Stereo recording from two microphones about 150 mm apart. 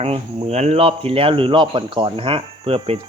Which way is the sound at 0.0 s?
40° right (ahead or behind).